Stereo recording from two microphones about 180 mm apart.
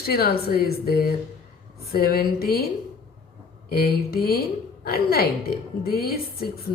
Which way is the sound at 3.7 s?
55° left (ahead or behind).